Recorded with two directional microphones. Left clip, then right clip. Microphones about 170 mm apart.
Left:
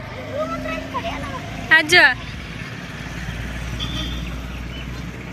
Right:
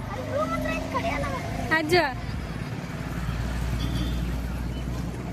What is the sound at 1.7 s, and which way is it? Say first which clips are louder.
Speech: left 10 dB; 5° right (ahead or behind).